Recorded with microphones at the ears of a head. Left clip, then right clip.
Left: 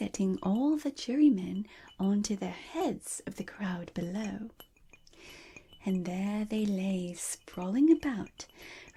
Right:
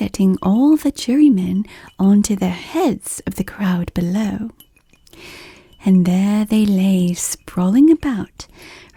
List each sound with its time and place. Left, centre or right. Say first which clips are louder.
0.0 s speech: right 14 dB; right